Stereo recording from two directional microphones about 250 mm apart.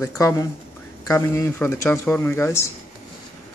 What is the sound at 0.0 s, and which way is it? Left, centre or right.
A man's voice, centre.